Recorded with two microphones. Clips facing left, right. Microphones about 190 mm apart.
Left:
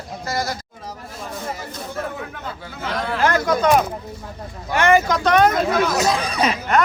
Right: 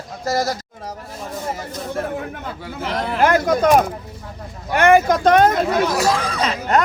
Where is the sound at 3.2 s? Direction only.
50° right (ahead or behind).